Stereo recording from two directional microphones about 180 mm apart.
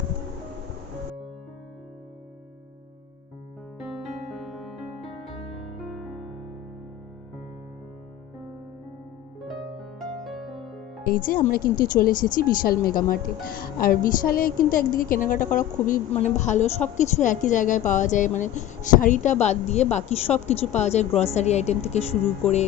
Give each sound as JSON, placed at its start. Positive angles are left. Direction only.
{"t": 3.8, "sound": "music", "side_deg": 0}
{"t": 10.0, "sound": "music", "side_deg": 0}
{"t": 11.0, "sound": "a woman's voice", "side_deg": 55}